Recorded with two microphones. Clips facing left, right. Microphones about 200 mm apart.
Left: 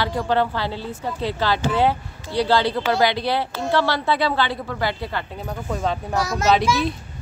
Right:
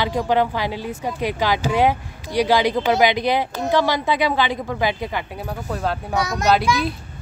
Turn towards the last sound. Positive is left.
turn(degrees=0)  # may be behind; listen again after turning